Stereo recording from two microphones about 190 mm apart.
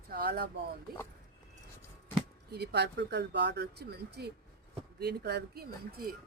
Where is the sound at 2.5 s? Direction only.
60° right (ahead or behind).